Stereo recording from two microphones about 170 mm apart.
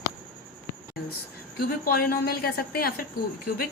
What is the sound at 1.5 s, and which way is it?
Speech, 60° left (ahead or behind).